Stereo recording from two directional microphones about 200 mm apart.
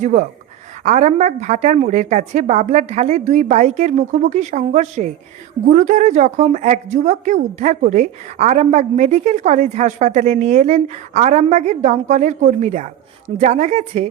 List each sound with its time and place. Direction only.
0.0 s a woman's voice: 35° right (ahead or behind)